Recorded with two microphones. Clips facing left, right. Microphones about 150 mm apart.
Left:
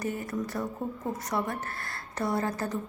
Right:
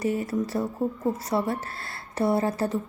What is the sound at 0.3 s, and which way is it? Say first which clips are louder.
A woman's voice: right 5 dB; 30° right (ahead or behind).